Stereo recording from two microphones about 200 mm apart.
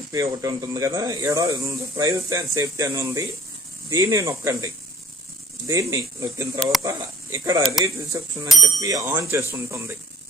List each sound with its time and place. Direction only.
0.1 s speech: 15° right (ahead or behind)
5.7 s speech: 15° right (ahead or behind)